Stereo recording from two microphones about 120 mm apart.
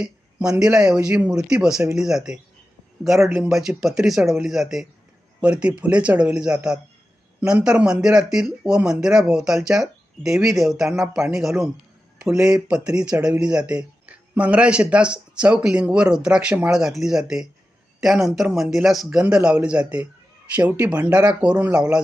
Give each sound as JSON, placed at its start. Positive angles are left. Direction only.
{"t": 0.0, "sound": "speech", "side_deg": -10}
{"t": 3.4, "sound": "speech", "side_deg": -5}